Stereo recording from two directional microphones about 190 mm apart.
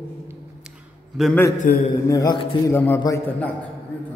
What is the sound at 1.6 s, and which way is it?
Speech, 50° left (ahead or behind).